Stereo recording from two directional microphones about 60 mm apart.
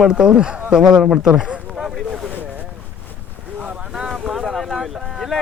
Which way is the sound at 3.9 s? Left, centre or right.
Centre.